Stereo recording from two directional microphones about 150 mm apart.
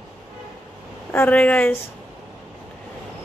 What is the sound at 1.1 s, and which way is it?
Speech, 15° left (ahead or behind).